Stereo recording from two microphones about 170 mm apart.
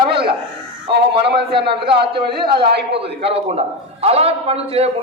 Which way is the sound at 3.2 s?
35° right (ahead or behind).